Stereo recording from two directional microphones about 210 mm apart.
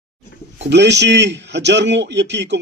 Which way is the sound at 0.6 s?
55° right (ahead or behind).